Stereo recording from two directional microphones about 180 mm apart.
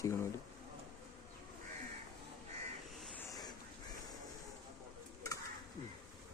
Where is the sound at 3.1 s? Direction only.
15° left (ahead or behind).